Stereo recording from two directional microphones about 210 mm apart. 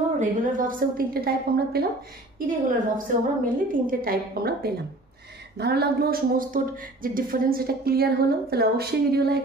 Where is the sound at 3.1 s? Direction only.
40° right (ahead or behind).